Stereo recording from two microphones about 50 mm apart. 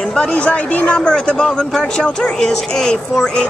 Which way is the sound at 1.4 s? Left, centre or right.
Centre.